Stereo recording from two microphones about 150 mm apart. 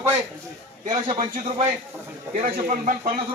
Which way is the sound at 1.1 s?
40° right (ahead or behind).